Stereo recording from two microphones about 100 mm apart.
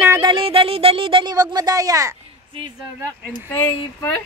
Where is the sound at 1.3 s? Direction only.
40° right (ahead or behind).